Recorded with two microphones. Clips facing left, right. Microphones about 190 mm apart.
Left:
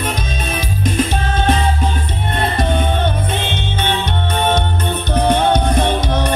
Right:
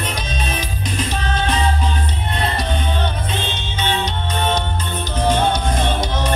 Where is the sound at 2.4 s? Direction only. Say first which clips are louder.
Left 5 dB; 55° left (ahead or behind).